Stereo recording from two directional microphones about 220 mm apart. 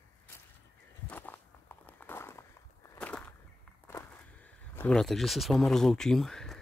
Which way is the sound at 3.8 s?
10° left (ahead or behind).